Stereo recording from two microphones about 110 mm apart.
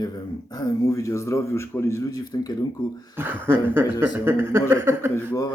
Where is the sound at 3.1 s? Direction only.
20° right (ahead or behind).